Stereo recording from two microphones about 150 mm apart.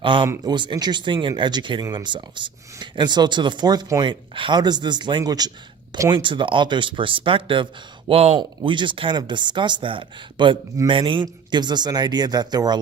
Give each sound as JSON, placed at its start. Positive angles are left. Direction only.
{"t": 0.0, "sound": "a man's voice", "side_deg": -35}